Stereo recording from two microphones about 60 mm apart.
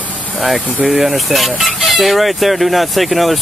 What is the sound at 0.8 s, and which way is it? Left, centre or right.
Speech, centre.